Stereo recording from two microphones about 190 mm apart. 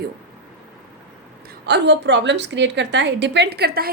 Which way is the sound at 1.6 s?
65° right (ahead or behind).